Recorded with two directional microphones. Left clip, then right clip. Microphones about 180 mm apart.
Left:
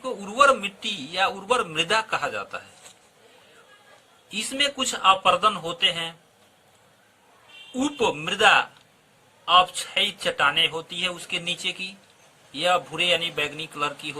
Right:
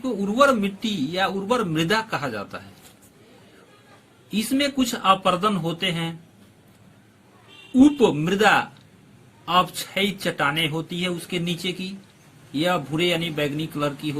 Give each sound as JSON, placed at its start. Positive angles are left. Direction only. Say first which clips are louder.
{"t": 0.0, "sound": "a man's voice", "louder": "even", "side_deg": 20}
{"t": 4.5, "sound": "a man's voice", "louder": "right 1 dB", "side_deg": 20}
{"t": 7.8, "sound": "speech", "louder": "right 7 dB", "side_deg": 20}